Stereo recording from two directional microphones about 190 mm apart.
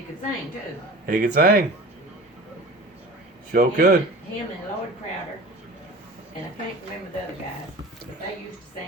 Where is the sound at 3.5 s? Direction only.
55° right (ahead or behind).